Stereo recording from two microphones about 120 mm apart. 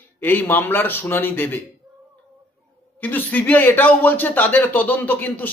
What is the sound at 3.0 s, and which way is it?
Speech, 15° left (ahead or behind).